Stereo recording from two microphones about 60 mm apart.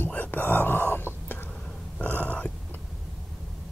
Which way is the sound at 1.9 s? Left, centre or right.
Left.